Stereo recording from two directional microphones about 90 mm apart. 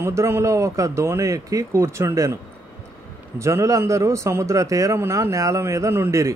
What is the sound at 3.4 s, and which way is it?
A man's voice, 35° right (ahead or behind).